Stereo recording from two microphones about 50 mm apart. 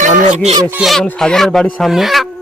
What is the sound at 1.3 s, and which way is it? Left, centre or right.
Speech, centre.